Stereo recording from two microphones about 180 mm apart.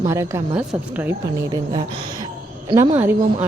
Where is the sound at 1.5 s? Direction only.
20° right (ahead or behind).